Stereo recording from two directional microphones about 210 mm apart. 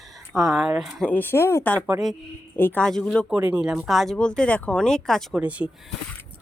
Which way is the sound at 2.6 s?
10° left (ahead or behind).